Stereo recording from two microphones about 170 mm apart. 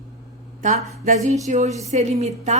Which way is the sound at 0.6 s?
45° right (ahead or behind).